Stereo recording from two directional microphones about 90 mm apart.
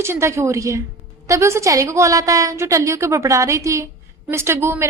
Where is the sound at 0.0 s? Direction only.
30° right (ahead or behind).